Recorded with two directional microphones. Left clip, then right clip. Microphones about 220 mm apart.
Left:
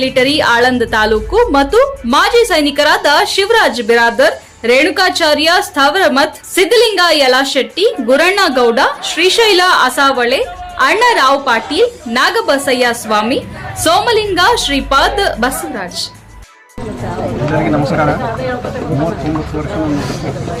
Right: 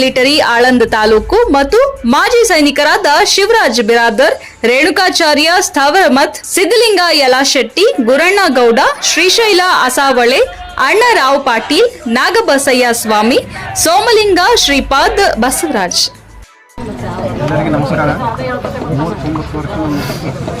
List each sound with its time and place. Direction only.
0.0 s speech: 25° right (ahead or behind)